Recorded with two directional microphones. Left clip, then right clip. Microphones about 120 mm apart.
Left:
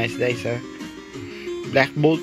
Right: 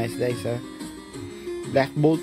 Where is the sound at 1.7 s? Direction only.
15° right (ahead or behind).